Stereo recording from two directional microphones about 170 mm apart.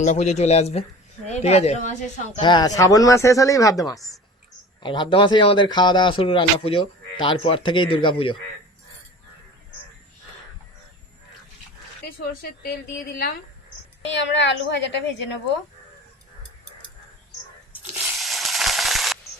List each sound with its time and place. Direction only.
0.0 s speech: 45° left (ahead or behind)
2.4 s speech: 25° left (ahead or behind)
12.0 s speech: 60° left (ahead or behind)
14.1 s a woman's voice: 90° left
18.2 s a sound: centre (ahead or behind)